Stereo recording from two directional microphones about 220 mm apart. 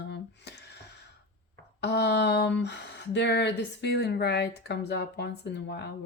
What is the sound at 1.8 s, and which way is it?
Speech, 50° left (ahead or behind).